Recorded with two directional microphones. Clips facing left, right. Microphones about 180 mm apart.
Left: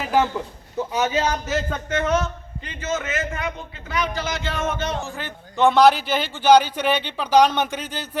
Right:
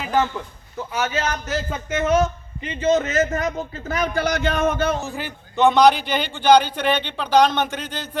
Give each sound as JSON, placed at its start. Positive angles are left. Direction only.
{"t": 0.0, "sound": "a man's voice", "side_deg": 10}
{"t": 1.5, "sound": "a sound", "side_deg": 0}
{"t": 1.9, "sound": "a man's voice", "side_deg": -10}
{"t": 2.8, "sound": "a man's voice", "side_deg": -35}
{"t": 5.0, "sound": "a man's voice", "side_deg": -15}
{"t": 5.5, "sound": "a man's voice", "side_deg": 0}